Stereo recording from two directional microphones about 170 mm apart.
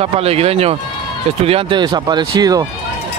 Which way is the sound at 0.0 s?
35° right (ahead or behind).